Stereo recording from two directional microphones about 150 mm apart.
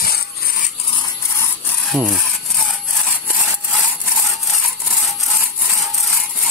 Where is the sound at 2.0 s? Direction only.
5° left (ahead or behind).